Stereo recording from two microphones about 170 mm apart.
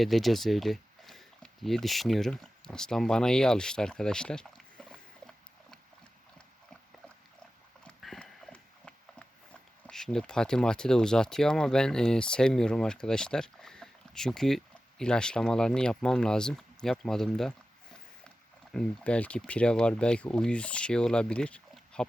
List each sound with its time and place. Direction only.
0.0 s speech: centre (ahead or behind)
7.9 s horse: 5° left (ahead or behind)
9.8 s speech: 5° left (ahead or behind)
18.7 s speech: 5° left (ahead or behind)